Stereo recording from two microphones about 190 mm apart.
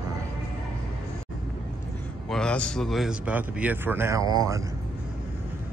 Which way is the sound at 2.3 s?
5° left (ahead or behind).